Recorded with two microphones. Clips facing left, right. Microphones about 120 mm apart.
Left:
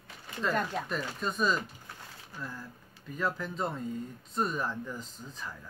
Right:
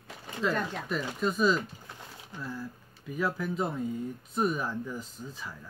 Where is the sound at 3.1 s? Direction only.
10° right (ahead or behind).